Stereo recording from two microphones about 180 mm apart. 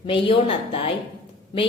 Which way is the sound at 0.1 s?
30° left (ahead or behind).